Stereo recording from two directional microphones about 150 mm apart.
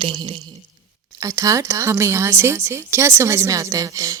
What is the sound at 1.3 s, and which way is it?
Speech, 20° right (ahead or behind).